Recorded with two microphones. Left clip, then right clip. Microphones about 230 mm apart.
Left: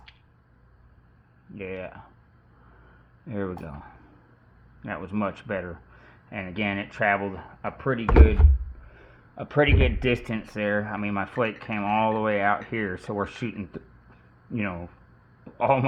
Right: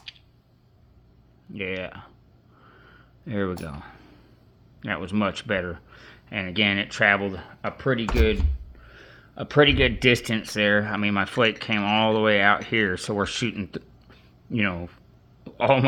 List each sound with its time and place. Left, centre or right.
1.5 s speech: right
3.2 s speech: right